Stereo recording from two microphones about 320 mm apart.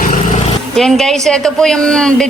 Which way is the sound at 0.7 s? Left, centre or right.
Centre.